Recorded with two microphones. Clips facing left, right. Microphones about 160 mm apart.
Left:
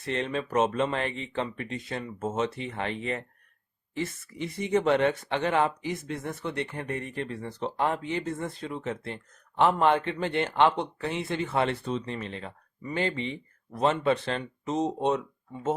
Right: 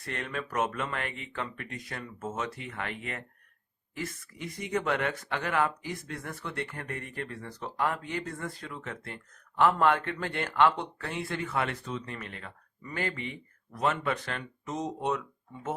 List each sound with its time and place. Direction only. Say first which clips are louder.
0.0 s speech: left 6 dB; 25° left (ahead or behind)